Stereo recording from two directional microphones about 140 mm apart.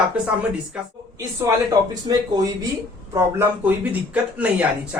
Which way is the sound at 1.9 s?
25° right (ahead or behind).